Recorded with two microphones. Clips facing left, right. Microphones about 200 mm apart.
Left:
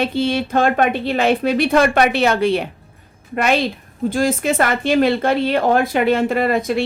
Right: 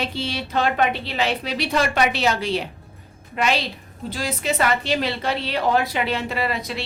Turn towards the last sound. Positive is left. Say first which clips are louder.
# left 9 dB
turn(degrees=50)  # may be behind; listen again after turning